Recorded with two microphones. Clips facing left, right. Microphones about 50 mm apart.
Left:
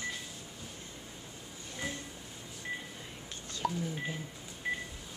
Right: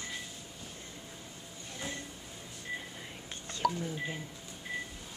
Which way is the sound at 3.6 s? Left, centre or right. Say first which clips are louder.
Right 3 dB; right.